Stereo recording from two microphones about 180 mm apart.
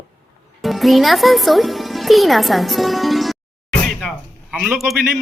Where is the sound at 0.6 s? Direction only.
Centre (ahead or behind).